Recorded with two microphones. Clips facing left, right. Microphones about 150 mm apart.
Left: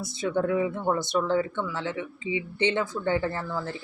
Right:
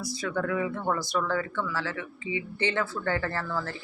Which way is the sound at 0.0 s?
25° left (ahead or behind).